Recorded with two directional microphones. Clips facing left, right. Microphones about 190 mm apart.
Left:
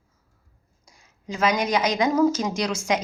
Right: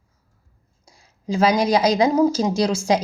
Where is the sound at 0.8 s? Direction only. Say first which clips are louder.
Right 8 dB; 35° right (ahead or behind).